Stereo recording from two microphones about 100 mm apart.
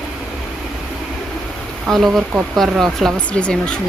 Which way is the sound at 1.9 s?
Centre (ahead or behind).